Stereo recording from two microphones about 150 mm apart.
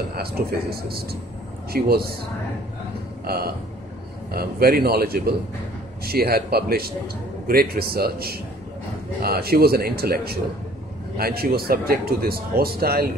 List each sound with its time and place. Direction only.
0.1 s a man's voice: 90° right
3.3 s a man's voice: 90° right